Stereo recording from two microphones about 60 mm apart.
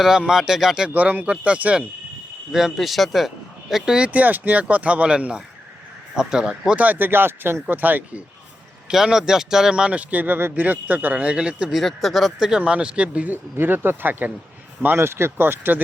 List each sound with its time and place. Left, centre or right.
0.2 s speech: centre
0.9 s speech: right
2.5 s speech: centre
4.0 s speech: right
6.7 s speech: right
8.9 s speech: centre
11.7 s speech: centre; by 13.3 s right
13.3 s speech: right
14.9 s speech: right